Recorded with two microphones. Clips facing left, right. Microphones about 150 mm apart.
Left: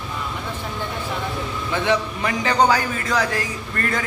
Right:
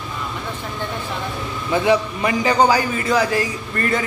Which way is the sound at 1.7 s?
10° right (ahead or behind).